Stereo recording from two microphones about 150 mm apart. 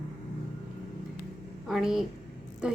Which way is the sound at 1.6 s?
Centre (ahead or behind).